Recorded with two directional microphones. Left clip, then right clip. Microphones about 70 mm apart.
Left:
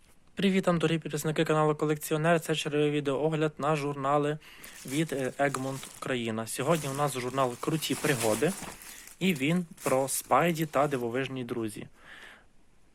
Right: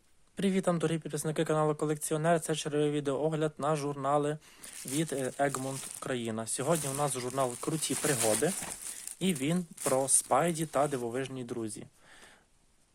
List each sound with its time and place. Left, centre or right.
0.3 s speech: right
4.8 s speech: right
7.3 s speech: right
9.1 s speech: right